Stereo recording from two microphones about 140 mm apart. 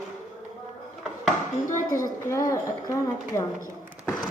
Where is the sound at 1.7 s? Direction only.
20° left (ahead or behind).